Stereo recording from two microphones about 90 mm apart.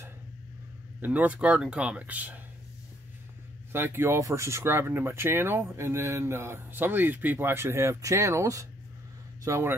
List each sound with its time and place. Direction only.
1.0 s speech: 20° right (ahead or behind)
3.7 s speech: 25° right (ahead or behind)